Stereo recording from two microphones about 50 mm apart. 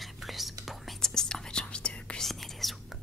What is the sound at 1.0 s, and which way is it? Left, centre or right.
Whispering, centre.